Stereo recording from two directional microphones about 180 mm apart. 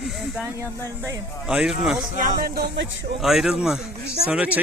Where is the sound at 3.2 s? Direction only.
Centre (ahead or behind).